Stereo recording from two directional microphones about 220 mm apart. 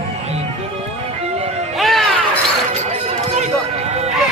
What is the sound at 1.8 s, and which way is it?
Music, centre (ahead or behind).